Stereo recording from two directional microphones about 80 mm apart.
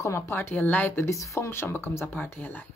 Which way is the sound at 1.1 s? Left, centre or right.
Left.